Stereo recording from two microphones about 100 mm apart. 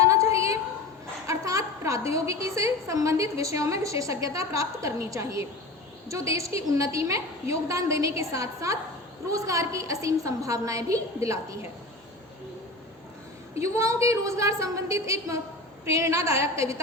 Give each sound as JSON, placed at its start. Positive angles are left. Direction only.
{"t": 0.0, "sound": "a sound", "side_deg": -30}
{"t": 2.1, "sound": "a woman's voice", "side_deg": -30}
{"t": 13.6, "sound": "a woman's voice", "side_deg": -30}